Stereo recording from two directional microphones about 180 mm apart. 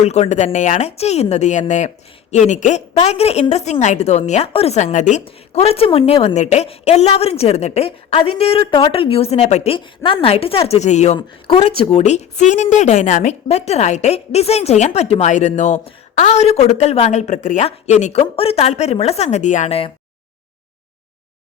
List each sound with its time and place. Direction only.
0.0 s a woman's voice: 40° left (ahead or behind)